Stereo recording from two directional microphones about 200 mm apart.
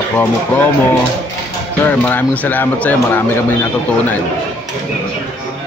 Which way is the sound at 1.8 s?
10° left (ahead or behind).